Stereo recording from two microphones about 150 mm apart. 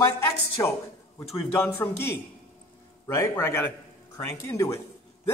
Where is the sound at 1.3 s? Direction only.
15° left (ahead or behind).